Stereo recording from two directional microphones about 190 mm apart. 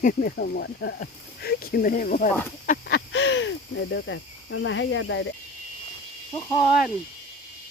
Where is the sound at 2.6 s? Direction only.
50° left (ahead or behind).